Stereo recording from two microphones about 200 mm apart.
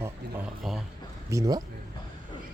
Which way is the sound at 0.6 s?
Centre (ahead or behind).